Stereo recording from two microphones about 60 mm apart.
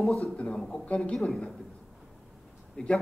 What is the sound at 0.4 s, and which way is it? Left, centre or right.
A woman's voice, centre.